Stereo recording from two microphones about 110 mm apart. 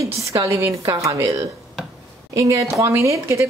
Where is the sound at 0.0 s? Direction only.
30° right (ahead or behind).